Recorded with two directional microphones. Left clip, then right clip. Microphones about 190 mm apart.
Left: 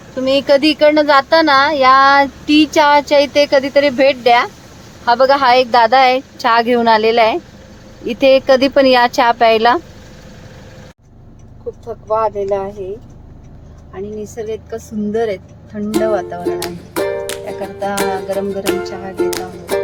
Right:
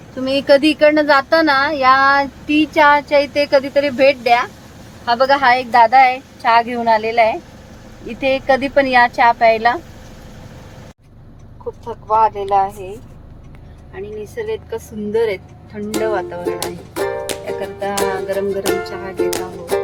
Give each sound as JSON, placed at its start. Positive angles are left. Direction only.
{"t": 0.2, "sound": "a woman's voice", "side_deg": 15}
{"t": 12.0, "sound": "speech", "side_deg": -5}
{"t": 14.4, "sound": "speech", "side_deg": 5}